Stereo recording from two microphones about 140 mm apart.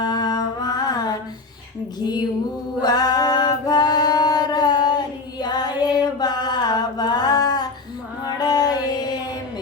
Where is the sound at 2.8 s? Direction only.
30° left (ahead or behind).